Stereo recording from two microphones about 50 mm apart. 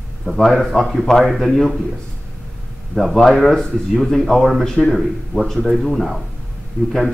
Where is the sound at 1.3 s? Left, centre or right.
Centre.